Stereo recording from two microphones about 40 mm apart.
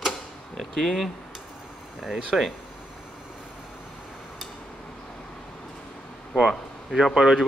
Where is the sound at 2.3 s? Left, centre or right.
Centre.